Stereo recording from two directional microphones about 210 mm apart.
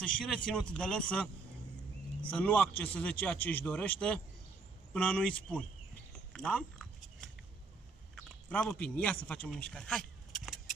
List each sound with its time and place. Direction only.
0.0 s speech: 5° left (ahead or behind)
2.3 s a man's voice: 5° left (ahead or behind)
6.3 s a sound: 5° left (ahead or behind)
8.2 s speech: 5° left (ahead or behind)